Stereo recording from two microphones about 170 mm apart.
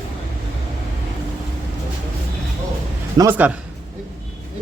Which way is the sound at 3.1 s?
15° right (ahead or behind).